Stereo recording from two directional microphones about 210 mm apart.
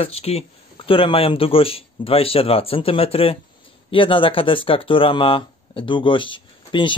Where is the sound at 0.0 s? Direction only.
30° left (ahead or behind).